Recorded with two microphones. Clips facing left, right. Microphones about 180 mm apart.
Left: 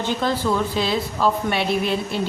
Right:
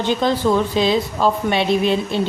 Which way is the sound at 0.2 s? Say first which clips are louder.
Right 4 dB; 15° right (ahead or behind).